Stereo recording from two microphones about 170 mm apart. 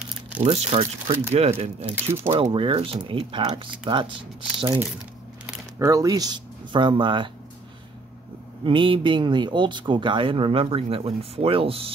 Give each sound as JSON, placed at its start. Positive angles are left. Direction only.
{"t": 0.4, "sound": "speech", "side_deg": -35}
{"t": 5.8, "sound": "speech", "side_deg": -20}
{"t": 8.6, "sound": "speech", "side_deg": -30}